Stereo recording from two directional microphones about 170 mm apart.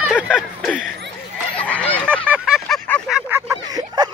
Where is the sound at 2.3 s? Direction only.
Centre (ahead or behind).